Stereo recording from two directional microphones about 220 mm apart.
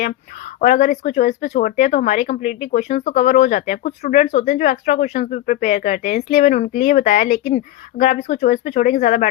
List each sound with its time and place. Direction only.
0.0 s speech: 35° left (ahead or behind)